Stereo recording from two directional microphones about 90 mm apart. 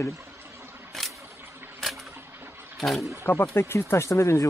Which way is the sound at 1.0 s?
5° left (ahead or behind).